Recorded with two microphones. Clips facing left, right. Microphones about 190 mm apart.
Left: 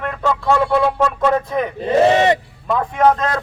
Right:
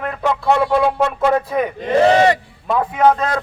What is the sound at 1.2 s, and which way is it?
Speech, 5° right (ahead or behind).